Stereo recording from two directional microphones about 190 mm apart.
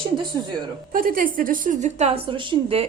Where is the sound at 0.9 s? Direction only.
45° right (ahead or behind).